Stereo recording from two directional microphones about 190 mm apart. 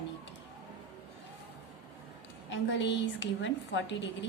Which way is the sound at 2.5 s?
75° left (ahead or behind).